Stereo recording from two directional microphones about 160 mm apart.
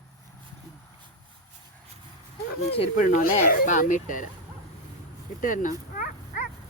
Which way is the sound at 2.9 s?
55° left (ahead or behind).